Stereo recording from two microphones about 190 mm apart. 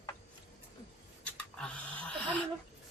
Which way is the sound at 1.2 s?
5° left (ahead or behind).